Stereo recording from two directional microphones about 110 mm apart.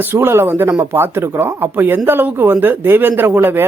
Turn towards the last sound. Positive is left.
turn(degrees=-20)  # may be behind; listen again after turning